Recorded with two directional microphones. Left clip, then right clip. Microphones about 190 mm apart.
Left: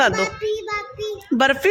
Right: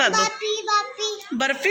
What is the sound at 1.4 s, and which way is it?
Speech, 60° left (ahead or behind).